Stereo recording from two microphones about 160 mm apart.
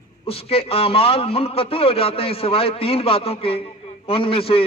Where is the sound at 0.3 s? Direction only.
35° left (ahead or behind).